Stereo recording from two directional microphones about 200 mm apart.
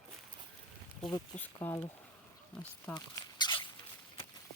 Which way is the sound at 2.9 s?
20° left (ahead or behind).